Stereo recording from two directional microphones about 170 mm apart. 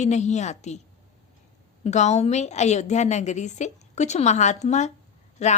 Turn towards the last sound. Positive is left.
turn(degrees=40)  # may be behind; listen again after turning